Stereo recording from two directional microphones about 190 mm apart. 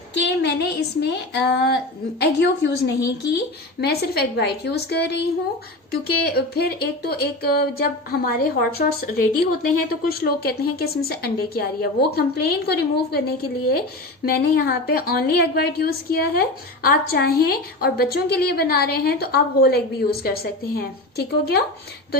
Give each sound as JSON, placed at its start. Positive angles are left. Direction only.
{"t": 0.1, "sound": "a woman's voice", "side_deg": 65}